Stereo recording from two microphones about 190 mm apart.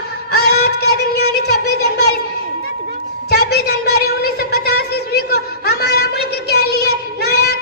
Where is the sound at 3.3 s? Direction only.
60° left (ahead or behind).